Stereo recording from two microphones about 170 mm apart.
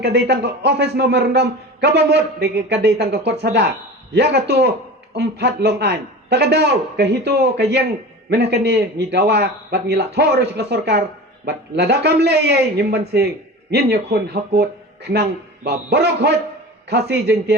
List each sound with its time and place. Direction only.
0.0 s a man's voice: 80° right